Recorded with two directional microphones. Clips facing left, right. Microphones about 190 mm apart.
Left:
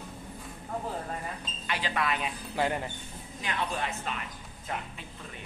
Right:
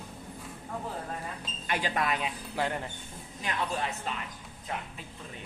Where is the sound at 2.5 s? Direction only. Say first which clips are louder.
Left 3 dB; 5° left (ahead or behind).